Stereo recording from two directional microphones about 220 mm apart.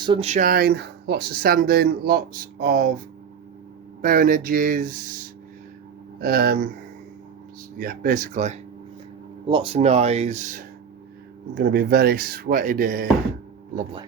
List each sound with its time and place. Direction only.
0.0 s speech: 25° right (ahead or behind); by 2.9 s 40° right (ahead or behind)
4.0 s speech: 40° right (ahead or behind)
7.8 s speech: 40° right (ahead or behind)
11.5 s speech: 45° right (ahead or behind)